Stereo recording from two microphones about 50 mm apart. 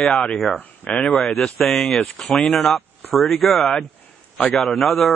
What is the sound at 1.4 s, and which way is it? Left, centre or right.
Speech, centre.